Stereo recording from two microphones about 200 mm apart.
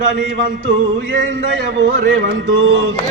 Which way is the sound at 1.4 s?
60° right (ahead or behind).